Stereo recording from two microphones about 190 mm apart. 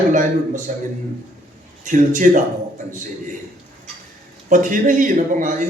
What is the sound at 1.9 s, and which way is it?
Speech, 45° right (ahead or behind).